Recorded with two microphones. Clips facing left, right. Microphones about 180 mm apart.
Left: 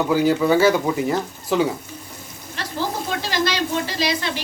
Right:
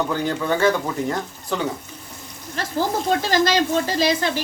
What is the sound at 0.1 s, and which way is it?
Speech, 5° left (ahead or behind).